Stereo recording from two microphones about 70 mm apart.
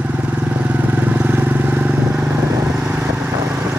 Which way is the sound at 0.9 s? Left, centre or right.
Right.